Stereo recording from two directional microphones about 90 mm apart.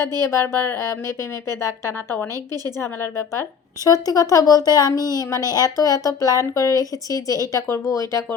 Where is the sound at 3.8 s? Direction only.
40° left (ahead or behind).